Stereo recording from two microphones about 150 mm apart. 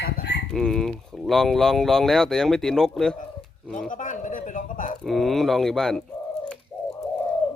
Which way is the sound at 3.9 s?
60° left (ahead or behind).